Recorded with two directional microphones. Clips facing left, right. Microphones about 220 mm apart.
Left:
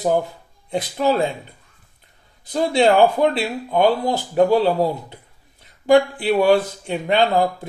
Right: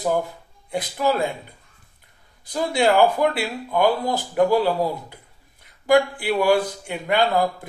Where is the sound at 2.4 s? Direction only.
20° left (ahead or behind).